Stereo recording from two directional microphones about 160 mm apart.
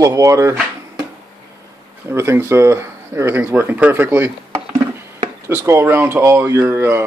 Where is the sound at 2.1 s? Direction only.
15° right (ahead or behind).